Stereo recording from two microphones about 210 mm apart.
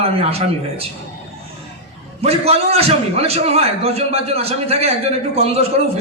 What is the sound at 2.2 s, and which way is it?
A man's voice, 30° right (ahead or behind).